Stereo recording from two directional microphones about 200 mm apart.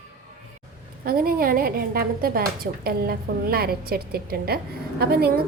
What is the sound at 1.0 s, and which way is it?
A woman's voice, 45° right (ahead or behind).